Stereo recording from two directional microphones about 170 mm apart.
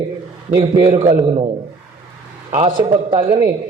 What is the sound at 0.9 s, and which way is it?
Speech, 35° right (ahead or behind).